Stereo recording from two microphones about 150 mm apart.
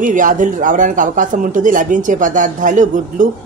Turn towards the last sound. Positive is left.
turn(degrees=-60)  # may be behind; listen again after turning